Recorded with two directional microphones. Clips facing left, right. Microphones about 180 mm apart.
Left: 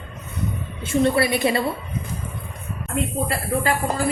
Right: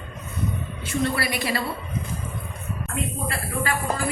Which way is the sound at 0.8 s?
25° left (ahead or behind).